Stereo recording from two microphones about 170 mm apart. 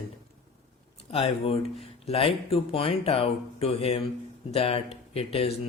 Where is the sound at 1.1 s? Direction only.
35° left (ahead or behind).